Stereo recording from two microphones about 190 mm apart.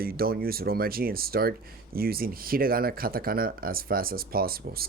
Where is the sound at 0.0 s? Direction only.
50° right (ahead or behind).